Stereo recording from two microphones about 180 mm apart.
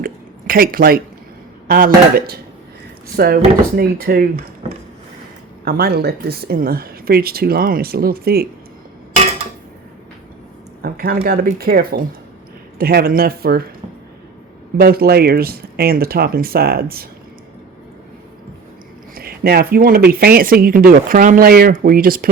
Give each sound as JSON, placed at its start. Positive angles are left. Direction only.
{"t": 0.0, "sound": "a sound", "side_deg": -55}
{"t": 1.6, "sound": "speech", "side_deg": -50}
{"t": 5.6, "sound": "speech", "side_deg": -60}
{"t": 9.1, "sound": "a sound", "side_deg": -35}
{"t": 10.8, "sound": "speech", "side_deg": -55}
{"t": 14.8, "sound": "speech", "side_deg": -55}
{"t": 19.1, "sound": "speech", "side_deg": -55}